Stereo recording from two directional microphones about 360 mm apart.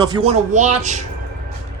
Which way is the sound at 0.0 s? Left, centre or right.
Centre.